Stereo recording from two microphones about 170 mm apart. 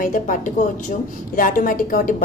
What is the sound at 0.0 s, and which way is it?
A woman's voice, 50° left (ahead or behind).